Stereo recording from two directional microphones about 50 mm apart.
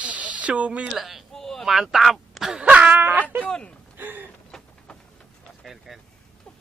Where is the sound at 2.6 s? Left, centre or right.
Right.